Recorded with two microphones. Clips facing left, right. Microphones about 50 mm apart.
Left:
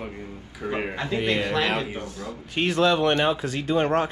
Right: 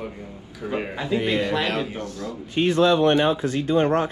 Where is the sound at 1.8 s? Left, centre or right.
Centre.